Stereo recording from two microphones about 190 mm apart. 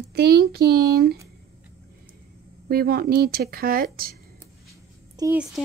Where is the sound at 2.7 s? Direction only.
55° right (ahead or behind).